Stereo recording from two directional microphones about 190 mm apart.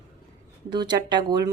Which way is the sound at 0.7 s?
25° right (ahead or behind).